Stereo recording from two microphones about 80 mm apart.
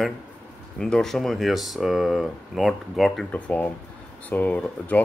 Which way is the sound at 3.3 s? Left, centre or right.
Centre.